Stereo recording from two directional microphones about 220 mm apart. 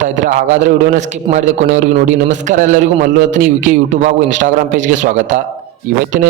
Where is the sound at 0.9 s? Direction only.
35° right (ahead or behind).